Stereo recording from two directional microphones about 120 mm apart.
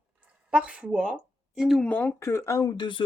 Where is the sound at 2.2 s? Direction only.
25° left (ahead or behind).